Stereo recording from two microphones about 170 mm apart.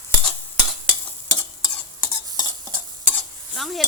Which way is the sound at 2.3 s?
25° right (ahead or behind).